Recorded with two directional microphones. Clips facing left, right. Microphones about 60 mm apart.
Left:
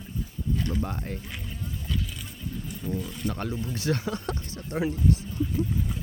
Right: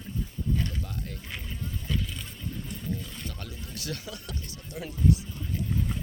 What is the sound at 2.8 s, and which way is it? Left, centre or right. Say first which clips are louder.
Speech: left 5 dB; centre.